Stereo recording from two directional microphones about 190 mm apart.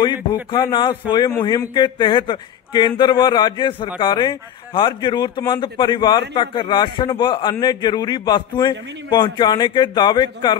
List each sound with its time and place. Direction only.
0.0 s a man's voice: 25° left (ahead or behind)